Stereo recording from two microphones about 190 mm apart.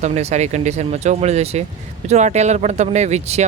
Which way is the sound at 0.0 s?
35° right (ahead or behind).